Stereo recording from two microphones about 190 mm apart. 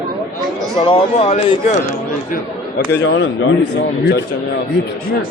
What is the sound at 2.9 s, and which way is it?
Speech, 70° left (ahead or behind).